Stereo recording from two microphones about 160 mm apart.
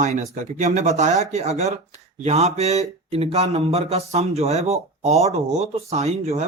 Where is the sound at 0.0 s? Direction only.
50° right (ahead or behind).